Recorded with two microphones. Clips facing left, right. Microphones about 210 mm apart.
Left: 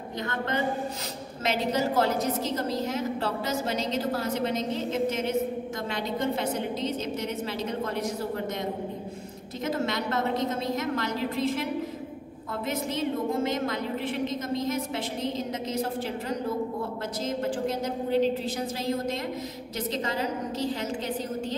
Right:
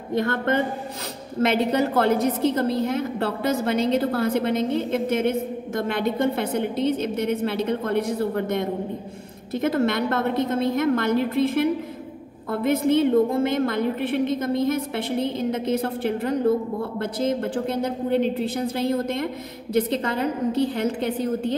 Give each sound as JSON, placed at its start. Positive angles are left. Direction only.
{"t": 0.2, "sound": "a woman's voice", "side_deg": -55}